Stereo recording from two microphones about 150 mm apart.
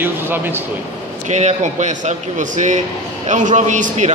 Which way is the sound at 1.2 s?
50° right (ahead or behind).